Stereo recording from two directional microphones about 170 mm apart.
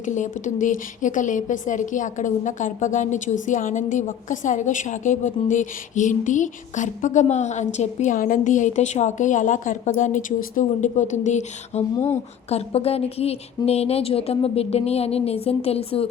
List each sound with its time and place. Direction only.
0.0 s a woman's voice: 45° left (ahead or behind)